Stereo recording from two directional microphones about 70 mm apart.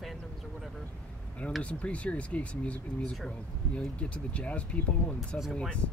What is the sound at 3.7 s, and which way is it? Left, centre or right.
Speech, centre.